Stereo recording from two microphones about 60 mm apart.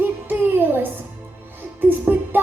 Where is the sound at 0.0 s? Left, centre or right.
Right.